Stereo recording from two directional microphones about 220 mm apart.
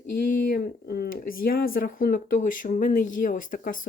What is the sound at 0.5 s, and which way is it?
Speech, 45° left (ahead or behind).